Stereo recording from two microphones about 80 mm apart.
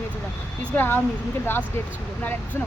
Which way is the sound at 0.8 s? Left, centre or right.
Left.